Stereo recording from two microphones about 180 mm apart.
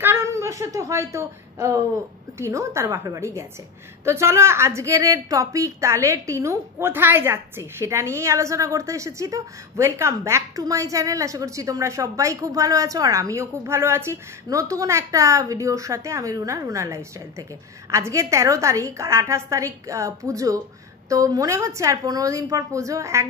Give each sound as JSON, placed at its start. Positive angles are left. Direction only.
{"t": 0.0, "sound": "a woman's voice", "side_deg": -15}